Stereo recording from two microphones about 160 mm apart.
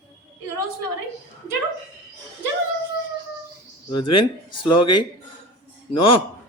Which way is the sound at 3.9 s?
30° left (ahead or behind).